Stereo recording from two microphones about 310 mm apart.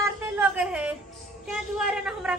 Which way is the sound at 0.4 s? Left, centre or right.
Centre.